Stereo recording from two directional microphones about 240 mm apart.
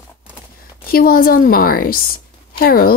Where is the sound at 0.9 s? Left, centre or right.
Left.